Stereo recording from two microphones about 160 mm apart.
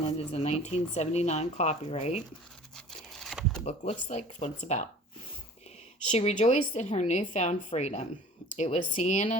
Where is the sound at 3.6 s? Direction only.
45° left (ahead or behind).